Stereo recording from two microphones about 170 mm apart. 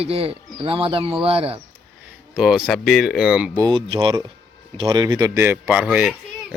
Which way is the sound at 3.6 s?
30° right (ahead or behind).